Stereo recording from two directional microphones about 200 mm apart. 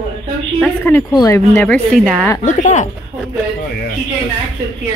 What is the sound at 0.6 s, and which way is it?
Speech, 10° left (ahead or behind).